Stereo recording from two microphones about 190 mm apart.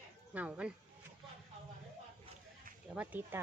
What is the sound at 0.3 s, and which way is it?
Speech, 5° right (ahead or behind).